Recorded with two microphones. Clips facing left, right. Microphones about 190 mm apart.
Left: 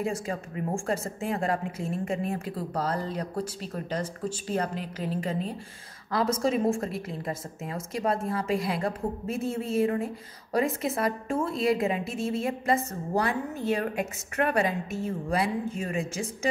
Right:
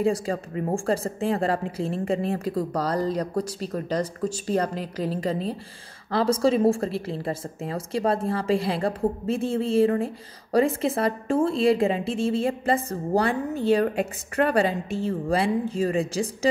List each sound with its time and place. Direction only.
0.0 s a woman's voice: 30° right (ahead or behind)